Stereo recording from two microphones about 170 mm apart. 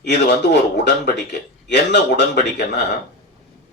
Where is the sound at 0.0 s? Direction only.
85° left.